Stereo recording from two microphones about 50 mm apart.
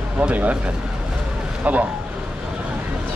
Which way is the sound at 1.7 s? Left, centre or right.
Right.